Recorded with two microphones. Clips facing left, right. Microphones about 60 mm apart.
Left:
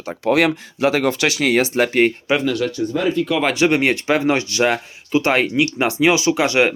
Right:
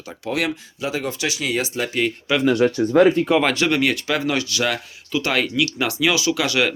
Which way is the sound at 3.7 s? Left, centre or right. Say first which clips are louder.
Left 3 dB; left.